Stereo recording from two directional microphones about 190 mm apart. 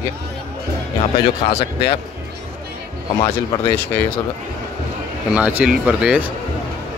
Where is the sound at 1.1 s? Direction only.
30° left (ahead or behind).